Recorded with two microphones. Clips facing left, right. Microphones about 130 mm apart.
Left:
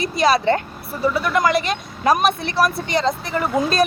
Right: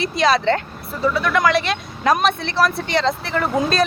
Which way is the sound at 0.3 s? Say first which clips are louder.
Even; 15° left (ahead or behind).